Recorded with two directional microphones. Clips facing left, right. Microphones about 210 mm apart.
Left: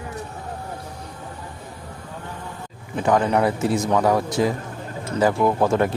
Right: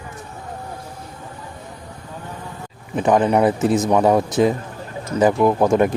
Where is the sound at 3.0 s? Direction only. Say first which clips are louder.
Right 3 dB; 25° right (ahead or behind).